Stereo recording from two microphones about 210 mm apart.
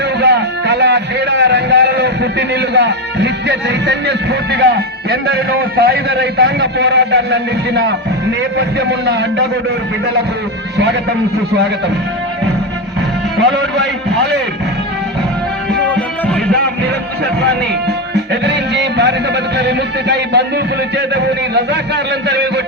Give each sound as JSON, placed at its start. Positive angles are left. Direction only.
{"t": 0.2, "sound": "a sound", "side_deg": -55}
{"t": 2.6, "sound": "a man's voice", "side_deg": -55}
{"t": 15.9, "sound": "music", "side_deg": 5}
{"t": 18.1, "sound": "music", "side_deg": -55}
{"t": 19.5, "sound": "a man's voice", "side_deg": -55}